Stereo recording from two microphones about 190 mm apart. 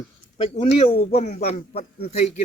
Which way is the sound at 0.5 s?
30° left (ahead or behind).